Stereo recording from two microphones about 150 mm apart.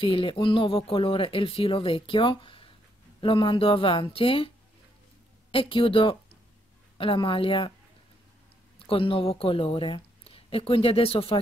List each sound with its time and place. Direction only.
0.0 s speech: 35° left (ahead or behind)
5.5 s speech: 35° left (ahead or behind)
8.7 s speech: 40° left (ahead or behind)